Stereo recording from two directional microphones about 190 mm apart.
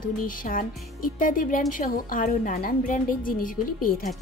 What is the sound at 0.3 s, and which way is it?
Speech, 45° left (ahead or behind).